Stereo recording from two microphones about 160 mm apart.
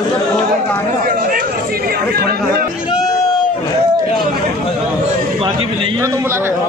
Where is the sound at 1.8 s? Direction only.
70° right (ahead or behind).